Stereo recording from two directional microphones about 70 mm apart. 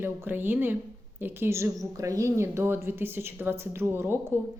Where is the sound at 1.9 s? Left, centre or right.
Right.